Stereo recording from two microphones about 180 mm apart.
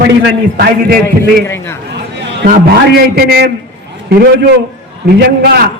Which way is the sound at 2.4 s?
55° right (ahead or behind).